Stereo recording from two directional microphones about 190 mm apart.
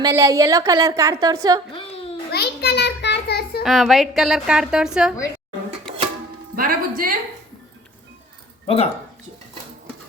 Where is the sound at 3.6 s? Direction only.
Centre (ahead or behind).